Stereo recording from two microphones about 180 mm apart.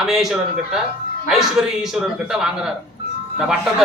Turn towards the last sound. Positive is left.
turn(degrees=-5)  # may be behind; listen again after turning